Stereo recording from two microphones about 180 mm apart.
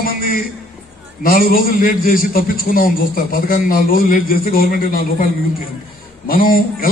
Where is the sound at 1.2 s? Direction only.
55° left (ahead or behind).